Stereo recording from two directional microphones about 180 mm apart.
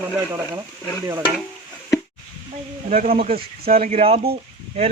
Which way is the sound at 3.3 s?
55° right (ahead or behind).